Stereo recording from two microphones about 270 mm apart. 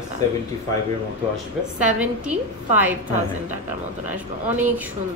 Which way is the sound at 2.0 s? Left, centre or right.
Centre.